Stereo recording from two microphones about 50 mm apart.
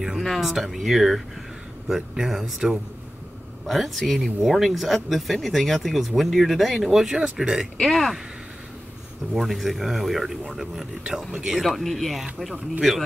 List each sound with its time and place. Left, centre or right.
0.2 s speech: centre
3.6 s speech: centre
7.8 s speech: centre
9.3 s speech: centre
11.6 s speech: centre